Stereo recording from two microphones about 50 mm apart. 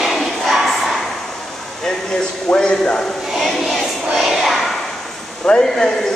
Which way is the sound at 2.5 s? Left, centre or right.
Left.